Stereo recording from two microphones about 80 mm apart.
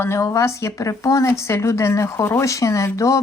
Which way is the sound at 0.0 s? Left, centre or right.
Left.